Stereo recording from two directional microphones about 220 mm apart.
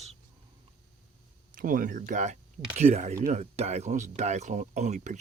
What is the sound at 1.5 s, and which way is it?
Speech, 40° right (ahead or behind).